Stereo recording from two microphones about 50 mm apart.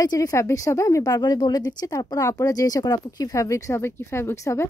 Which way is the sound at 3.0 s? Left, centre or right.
Left.